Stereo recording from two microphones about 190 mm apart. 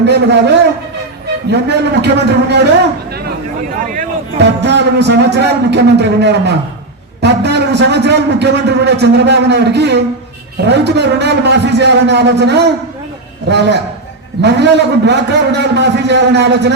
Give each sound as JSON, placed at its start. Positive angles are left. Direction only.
{"t": 0.0, "sound": "a man's voice", "side_deg": -65}
{"t": 4.4, "sound": "a man's voice", "side_deg": -65}